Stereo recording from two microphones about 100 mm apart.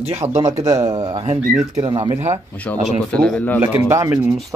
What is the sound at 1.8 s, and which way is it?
Speech, 55° right (ahead or behind).